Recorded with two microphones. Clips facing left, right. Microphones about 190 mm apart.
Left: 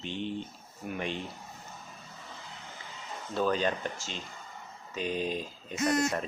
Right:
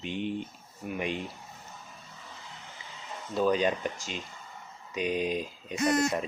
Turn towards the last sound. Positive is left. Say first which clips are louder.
# right 2 dB
turn(degrees=-10)  # may be behind; listen again after turning